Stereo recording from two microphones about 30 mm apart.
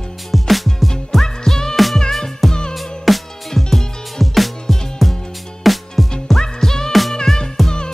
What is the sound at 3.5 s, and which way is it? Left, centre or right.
Music, centre.